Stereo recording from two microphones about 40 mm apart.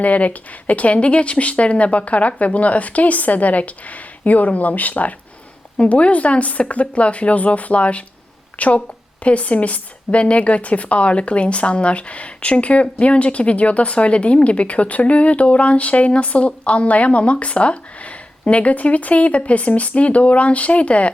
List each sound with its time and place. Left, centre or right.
0.0 s speech: left
5.7 s a woman's voice: left